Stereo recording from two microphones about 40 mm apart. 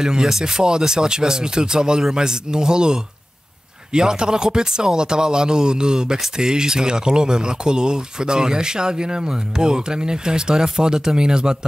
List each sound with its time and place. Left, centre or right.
0.0 s speech: centre